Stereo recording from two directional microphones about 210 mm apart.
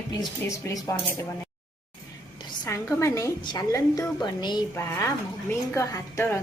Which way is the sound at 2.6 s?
15° left (ahead or behind).